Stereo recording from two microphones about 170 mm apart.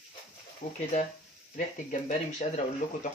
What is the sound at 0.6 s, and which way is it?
Speech, 45° left (ahead or behind).